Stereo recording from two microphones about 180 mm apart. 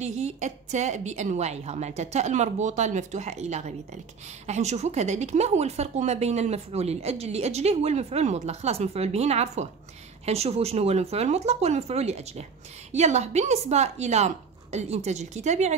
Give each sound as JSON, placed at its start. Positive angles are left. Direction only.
{"t": 0.0, "sound": "speech", "side_deg": -40}